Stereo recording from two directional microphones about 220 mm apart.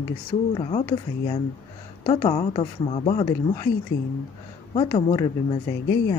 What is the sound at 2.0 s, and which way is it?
A woman's voice, 20° left (ahead or behind).